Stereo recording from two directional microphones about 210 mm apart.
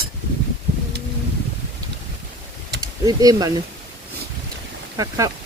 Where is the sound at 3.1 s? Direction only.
15° right (ahead or behind).